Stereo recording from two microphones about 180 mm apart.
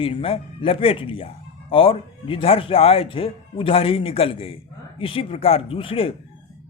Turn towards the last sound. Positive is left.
turn(degrees=30)  # may be behind; listen again after turning